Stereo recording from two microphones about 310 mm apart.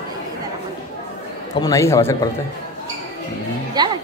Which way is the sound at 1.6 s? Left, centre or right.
Centre.